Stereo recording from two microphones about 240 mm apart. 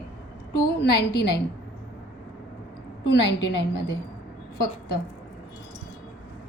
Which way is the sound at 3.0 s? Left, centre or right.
Left.